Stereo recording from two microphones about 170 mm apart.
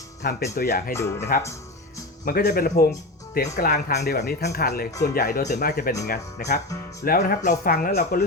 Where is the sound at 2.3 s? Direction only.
60° left (ahead or behind).